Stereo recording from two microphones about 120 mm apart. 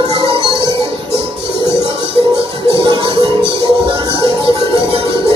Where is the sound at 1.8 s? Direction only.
50° right (ahead or behind).